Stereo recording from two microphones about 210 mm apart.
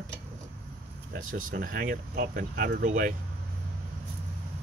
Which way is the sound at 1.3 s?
40° right (ahead or behind).